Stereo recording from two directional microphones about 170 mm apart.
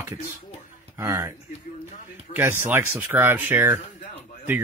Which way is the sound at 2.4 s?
10° right (ahead or behind).